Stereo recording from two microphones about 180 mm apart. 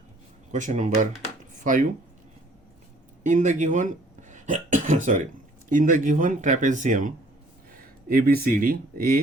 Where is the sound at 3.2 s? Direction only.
45° right (ahead or behind).